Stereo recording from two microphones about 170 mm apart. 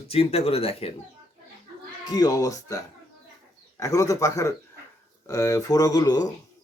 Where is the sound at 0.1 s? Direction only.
35° left (ahead or behind).